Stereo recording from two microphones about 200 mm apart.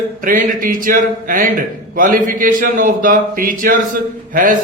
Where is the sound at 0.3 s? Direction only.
45° right (ahead or behind).